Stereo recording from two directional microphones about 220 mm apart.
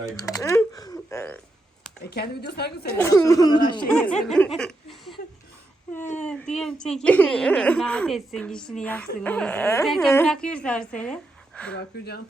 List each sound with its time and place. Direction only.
0.2 s speech: 15° left (ahead or behind)
2.0 s a woman's voice: 45° left (ahead or behind)
2.9 s speech: 10° left (ahead or behind)
3.9 s speech: 5° left (ahead or behind)
6.1 s speech: 5° left (ahead or behind)
11.9 s a woman's voice: 45° left (ahead or behind)